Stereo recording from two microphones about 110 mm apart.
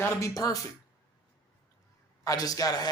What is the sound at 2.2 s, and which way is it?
Speech, 35° left (ahead or behind).